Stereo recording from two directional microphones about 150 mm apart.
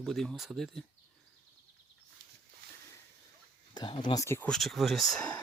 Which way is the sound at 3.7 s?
30° left (ahead or behind).